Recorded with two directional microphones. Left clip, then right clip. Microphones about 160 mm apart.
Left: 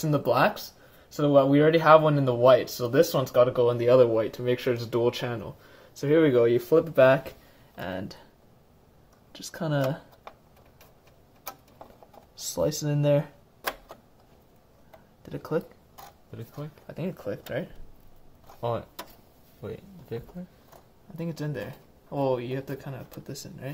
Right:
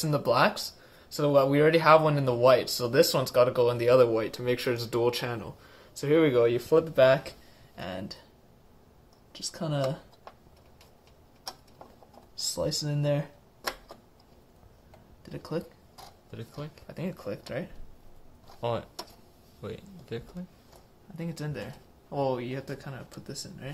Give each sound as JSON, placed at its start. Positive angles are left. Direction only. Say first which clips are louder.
{"t": 0.0, "sound": "speech", "louder": "left 1 dB", "side_deg": 35}
{"t": 9.3, "sound": "speech", "louder": "left 3 dB", "side_deg": 45}
{"t": 12.4, "sound": "speech", "louder": "left 3 dB", "side_deg": 50}
{"t": 15.2, "sound": "speech", "louder": "left 5 dB", "side_deg": 55}
{"t": 16.3, "sound": "speech", "louder": "even", "side_deg": 0}
{"t": 16.8, "sound": "speech", "louder": "left 4 dB", "side_deg": 30}
{"t": 18.6, "sound": "speech", "louder": "left 1 dB", "side_deg": 10}
{"t": 22.1, "sound": "speech", "louder": "left 3 dB", "side_deg": 40}